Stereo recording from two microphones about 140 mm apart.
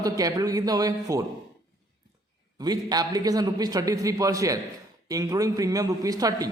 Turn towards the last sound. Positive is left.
turn(degrees=-25)  # may be behind; listen again after turning